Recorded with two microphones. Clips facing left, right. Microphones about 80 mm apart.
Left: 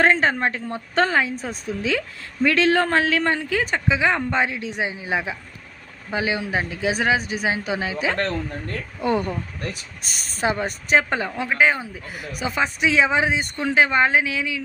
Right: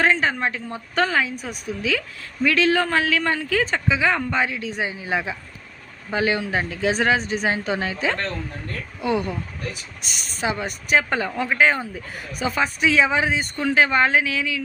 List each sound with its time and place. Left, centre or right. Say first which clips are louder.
0.0 s a woman's voice: left 2 dB; left
3.6 s speech: even; centre
9.0 s a woman's voice: left 1 dB; left
11.3 s speech: even; centre
12.4 s speech: right 1 dB; centre